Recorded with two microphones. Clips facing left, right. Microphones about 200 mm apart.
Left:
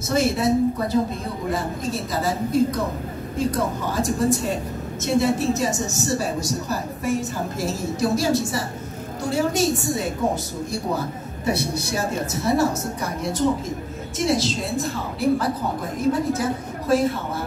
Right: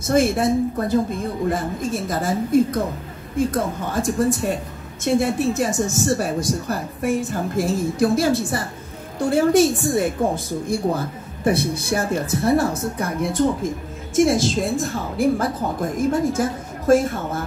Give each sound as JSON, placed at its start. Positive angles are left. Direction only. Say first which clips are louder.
{"t": 0.0, "sound": "a woman's voice", "louder": "right 3 dB", "side_deg": -50}